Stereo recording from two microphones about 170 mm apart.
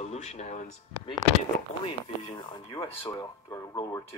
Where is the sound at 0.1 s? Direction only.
40° left (ahead or behind).